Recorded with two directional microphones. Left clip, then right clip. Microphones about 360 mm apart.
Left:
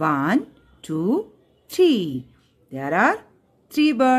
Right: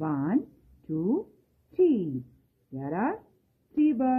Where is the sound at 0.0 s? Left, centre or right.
Centre.